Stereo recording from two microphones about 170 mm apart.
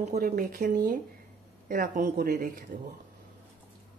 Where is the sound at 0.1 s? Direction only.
55° right (ahead or behind).